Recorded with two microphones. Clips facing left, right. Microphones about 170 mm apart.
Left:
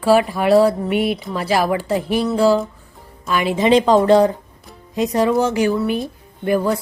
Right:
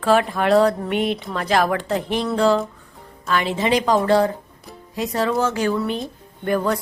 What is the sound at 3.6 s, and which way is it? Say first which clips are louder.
Speech: left 6 dB; 25° left (ahead or behind).